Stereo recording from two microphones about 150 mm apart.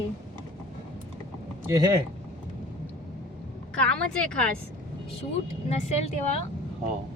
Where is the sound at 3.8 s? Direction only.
5° left (ahead or behind).